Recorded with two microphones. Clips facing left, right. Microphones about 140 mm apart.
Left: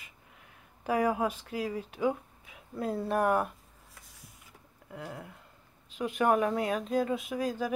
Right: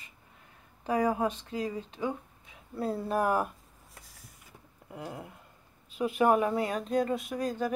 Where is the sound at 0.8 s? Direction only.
5° left (ahead or behind).